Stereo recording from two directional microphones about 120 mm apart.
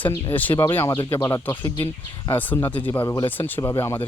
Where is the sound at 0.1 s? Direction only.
15° left (ahead or behind).